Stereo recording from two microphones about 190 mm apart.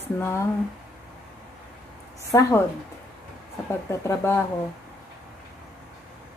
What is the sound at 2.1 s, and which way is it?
Speech, 15° left (ahead or behind).